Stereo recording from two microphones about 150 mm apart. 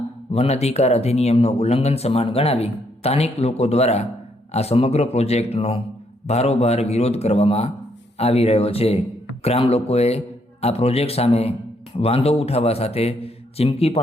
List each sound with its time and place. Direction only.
0.3 s speech: 45° left (ahead or behind)